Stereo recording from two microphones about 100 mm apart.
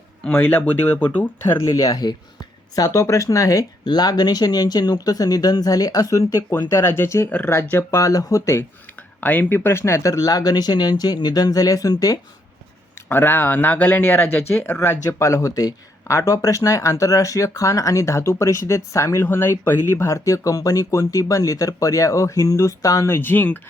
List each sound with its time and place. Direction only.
0.3 s speech: 15° left (ahead or behind)
1.6 s speech: 35° left (ahead or behind)
7.3 s speech: 15° left (ahead or behind)
7.5 s speech: 25° left (ahead or behind)
9.2 s speech: 15° left (ahead or behind); by 12.2 s 40° left (ahead or behind)
13.1 s speech: 20° left (ahead or behind)